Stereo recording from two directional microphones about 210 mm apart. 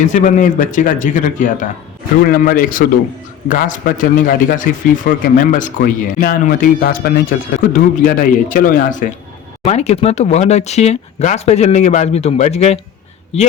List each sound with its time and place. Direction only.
0.1 s a man's voice: 35° left (ahead or behind)